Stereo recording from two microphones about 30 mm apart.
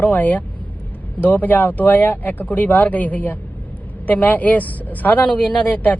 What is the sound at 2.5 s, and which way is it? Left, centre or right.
Speech, left.